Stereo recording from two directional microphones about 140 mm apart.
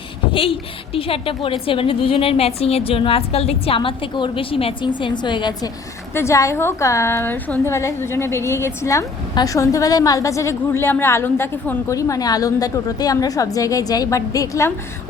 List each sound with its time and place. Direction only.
0.9 s a woman's voice: 40° left (ahead or behind)
6.1 s a woman's voice: 20° left (ahead or behind)